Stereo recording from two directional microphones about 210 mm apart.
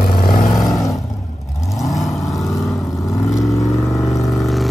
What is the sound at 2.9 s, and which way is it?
Vehicle, 15° left (ahead or behind).